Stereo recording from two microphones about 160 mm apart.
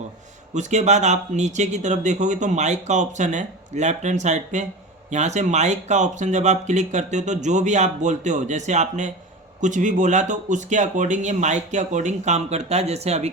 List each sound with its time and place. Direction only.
0.5 s speech: 45° right (ahead or behind)